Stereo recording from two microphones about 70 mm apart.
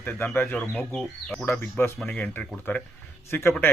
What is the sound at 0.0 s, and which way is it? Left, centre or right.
Speech, left.